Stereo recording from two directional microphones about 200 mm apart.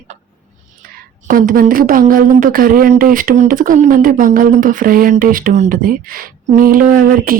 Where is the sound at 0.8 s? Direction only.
45° right (ahead or behind).